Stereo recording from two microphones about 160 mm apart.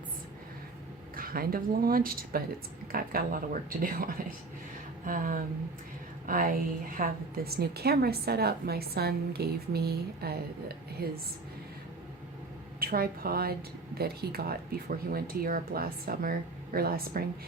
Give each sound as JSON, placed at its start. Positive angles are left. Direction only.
{"t": 1.1, "sound": "a woman's voice", "side_deg": -65}
{"t": 12.8, "sound": "a woman's voice", "side_deg": -65}